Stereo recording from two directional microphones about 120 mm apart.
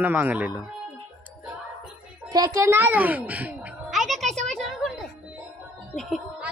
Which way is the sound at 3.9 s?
Centre (ahead or behind).